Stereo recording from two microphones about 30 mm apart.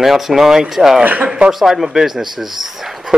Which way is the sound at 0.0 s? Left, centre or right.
Centre.